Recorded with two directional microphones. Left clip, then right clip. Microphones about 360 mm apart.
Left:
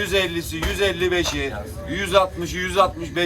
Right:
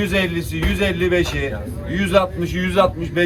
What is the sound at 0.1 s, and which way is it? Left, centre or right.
Speech, centre.